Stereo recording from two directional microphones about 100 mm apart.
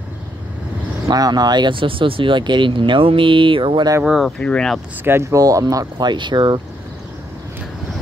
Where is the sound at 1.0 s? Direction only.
40° right (ahead or behind); by 3.8 s 60° right (ahead or behind).